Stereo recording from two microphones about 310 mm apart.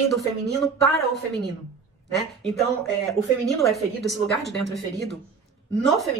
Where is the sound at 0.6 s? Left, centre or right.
Centre.